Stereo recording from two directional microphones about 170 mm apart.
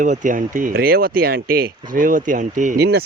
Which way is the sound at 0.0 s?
50° right (ahead or behind).